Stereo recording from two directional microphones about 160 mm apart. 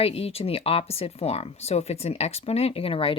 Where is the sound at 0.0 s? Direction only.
40° left (ahead or behind).